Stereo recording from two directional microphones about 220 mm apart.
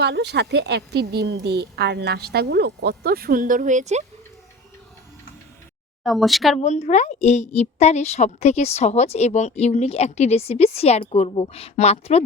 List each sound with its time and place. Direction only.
0.0 s a woman's voice: 50° right (ahead or behind); by 4.0 s 30° right (ahead or behind)
6.0 s speech: centre (ahead or behind)
6.6 s a woman's voice: 30° left (ahead or behind)